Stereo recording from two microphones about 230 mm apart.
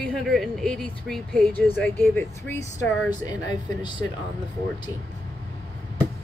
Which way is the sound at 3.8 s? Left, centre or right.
Centre.